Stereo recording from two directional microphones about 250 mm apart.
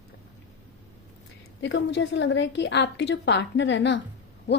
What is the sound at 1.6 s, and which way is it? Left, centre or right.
Speech, left.